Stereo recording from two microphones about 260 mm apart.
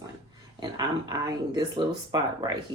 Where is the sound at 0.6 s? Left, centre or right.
Centre.